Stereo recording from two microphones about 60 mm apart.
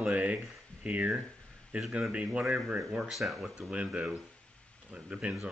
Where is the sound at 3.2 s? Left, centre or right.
Centre.